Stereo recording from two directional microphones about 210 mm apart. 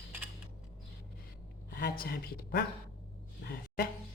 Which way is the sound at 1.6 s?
50° left (ahead or behind).